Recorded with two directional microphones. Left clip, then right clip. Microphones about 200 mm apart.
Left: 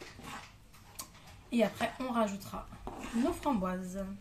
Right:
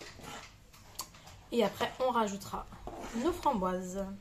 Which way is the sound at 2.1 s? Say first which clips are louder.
Right 1 dB; 25° right (ahead or behind).